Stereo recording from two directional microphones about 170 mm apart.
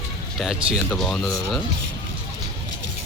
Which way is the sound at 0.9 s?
5° left (ahead or behind).